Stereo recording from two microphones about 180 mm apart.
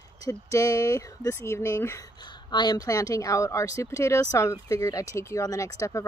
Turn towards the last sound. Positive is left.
turn(degrees=15)  # may be behind; listen again after turning